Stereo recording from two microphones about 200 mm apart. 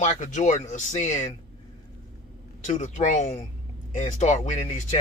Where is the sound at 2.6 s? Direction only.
35° left (ahead or behind).